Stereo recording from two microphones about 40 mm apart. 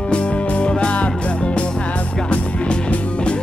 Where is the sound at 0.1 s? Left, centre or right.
Left.